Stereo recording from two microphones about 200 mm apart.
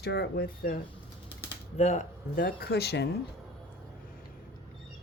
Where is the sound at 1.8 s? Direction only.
35° left (ahead or behind); by 3.1 s 55° left (ahead or behind).